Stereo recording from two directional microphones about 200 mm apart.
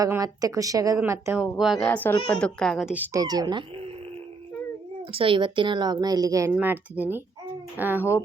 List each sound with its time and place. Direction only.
0.0 s speech: 15° right (ahead or behind)
5.1 s speech: 25° right (ahead or behind); by 8.0 s 10° right (ahead or behind)